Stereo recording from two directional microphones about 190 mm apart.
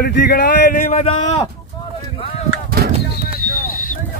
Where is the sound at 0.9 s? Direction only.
30° left (ahead or behind).